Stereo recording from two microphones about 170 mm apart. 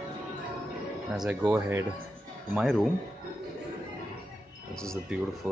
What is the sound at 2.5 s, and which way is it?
Speech, centre (ahead or behind).